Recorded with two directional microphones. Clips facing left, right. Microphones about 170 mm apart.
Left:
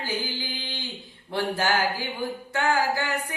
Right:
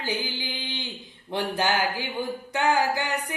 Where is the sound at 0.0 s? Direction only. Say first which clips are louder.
Even; 20° right (ahead or behind).